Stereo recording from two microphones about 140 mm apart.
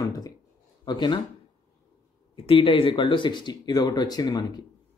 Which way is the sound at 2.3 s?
40° left (ahead or behind).